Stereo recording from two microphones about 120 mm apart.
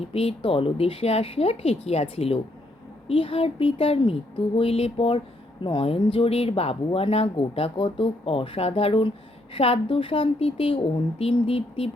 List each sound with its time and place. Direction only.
0.0 s speech: 55° left (ahead or behind)